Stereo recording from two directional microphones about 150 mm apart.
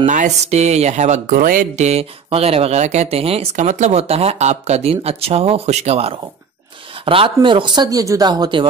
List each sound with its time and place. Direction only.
0.0 s speech: 50° right (ahead or behind); by 8.6 s 30° right (ahead or behind)